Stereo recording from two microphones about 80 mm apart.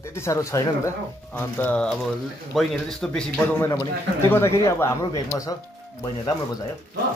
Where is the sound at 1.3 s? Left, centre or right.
Left.